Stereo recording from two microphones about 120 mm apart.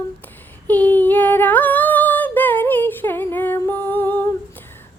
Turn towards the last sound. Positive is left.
turn(degrees=15)  # may be behind; listen again after turning